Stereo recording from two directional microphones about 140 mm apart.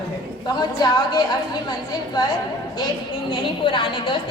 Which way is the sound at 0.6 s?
30° left (ahead or behind).